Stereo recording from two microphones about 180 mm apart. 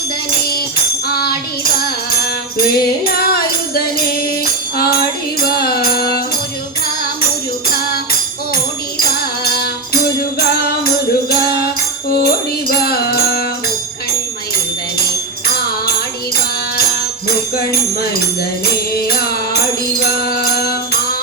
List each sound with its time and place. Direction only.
1.0 s music: 60° left (ahead or behind)
2.6 s music: 55° left (ahead or behind)
5.5 s music: 60° left (ahead or behind)
9.0 s music: 60° left (ahead or behind)
12.6 s music: 60° left (ahead or behind)
20.2 s music: 60° left (ahead or behind)